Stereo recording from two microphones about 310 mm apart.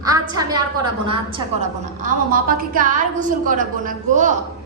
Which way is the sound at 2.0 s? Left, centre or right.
Right.